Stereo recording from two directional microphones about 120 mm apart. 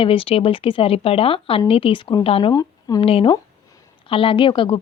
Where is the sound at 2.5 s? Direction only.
30° left (ahead or behind).